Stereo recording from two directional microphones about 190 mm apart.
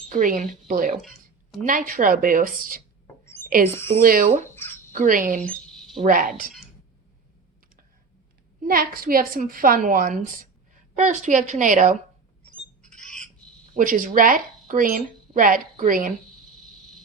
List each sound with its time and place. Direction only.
0.1 s a woman's voice: 45° right (ahead or behind)
1.0 s a sound: centre (ahead or behind)
1.6 s a woman's voice: 45° right (ahead or behind)
3.7 s speech: 10° left (ahead or behind)
4.0 s a woman's voice: 50° right (ahead or behind)
4.4 s a sound: 10° left (ahead or behind)
4.9 s a woman's voice: 45° right (ahead or behind)
5.5 s a sound: centre (ahead or behind)
6.0 s a woman's voice: 45° right (ahead or behind)
8.6 s a woman's voice: 50° right (ahead or behind)
13.0 s squawk: 5° left (ahead or behind)
13.7 s a woman's voice: 45° right (ahead or behind)